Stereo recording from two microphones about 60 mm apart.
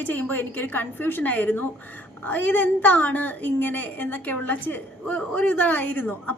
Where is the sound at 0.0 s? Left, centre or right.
Left.